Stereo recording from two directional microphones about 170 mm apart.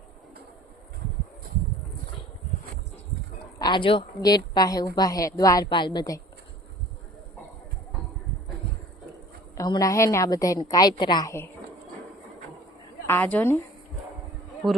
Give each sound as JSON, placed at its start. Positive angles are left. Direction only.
{"t": 3.6, "sound": "a woman's voice", "side_deg": 30}
{"t": 9.6, "sound": "a woman's voice", "side_deg": 20}
{"t": 13.1, "sound": "a woman's voice", "side_deg": 10}